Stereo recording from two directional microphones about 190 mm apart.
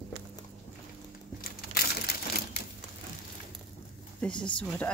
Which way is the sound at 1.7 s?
55° left (ahead or behind).